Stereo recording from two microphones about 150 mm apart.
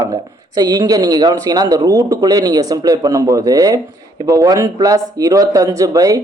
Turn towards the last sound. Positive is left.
turn(degrees=-25)  # may be behind; listen again after turning